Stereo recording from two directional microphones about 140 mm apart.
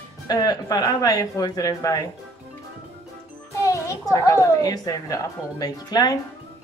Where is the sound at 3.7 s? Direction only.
25° left (ahead or behind).